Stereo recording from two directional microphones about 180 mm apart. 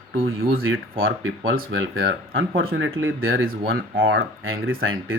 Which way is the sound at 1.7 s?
90° right.